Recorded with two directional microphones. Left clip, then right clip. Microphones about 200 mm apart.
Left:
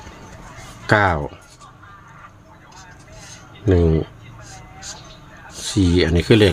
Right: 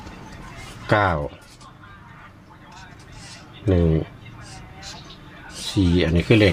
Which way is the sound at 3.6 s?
30° left (ahead or behind).